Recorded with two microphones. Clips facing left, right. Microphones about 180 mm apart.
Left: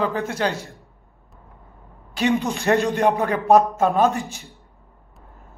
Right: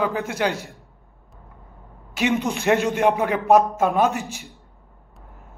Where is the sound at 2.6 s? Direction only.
15° right (ahead or behind).